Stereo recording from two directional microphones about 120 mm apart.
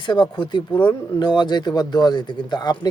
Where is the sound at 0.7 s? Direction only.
15° left (ahead or behind).